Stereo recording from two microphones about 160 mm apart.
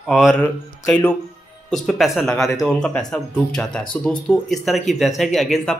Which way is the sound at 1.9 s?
Centre (ahead or behind).